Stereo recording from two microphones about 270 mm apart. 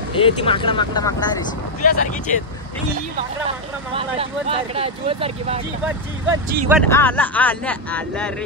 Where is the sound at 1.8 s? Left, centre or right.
Left.